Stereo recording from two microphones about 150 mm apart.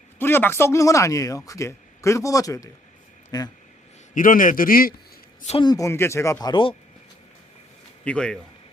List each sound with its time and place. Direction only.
0.2 s speech: 15° left (ahead or behind)
4.1 s a man's voice: 65° left (ahead or behind)
5.5 s speech: 25° left (ahead or behind)
6.5 s speech: 35° left (ahead or behind)
8.0 s speech: 5° left (ahead or behind)